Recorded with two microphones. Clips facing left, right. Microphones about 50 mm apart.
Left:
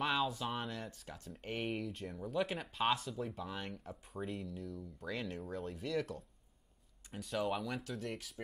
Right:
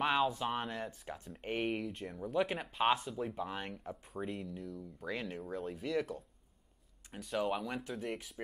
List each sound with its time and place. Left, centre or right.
0.0 s a sound: centre
0.3 s speech: centre
0.7 s speech: right
1.7 s speech: centre; by 3.7 s right
3.7 s speech: centre
7.6 s speech: centre
7.9 s speech: centre